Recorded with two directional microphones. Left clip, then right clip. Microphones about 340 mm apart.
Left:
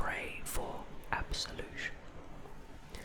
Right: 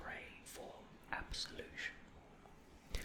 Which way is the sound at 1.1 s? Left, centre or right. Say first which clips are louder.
Left 7 dB; centre.